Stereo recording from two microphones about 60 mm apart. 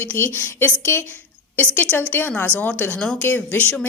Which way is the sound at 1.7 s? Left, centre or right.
Left.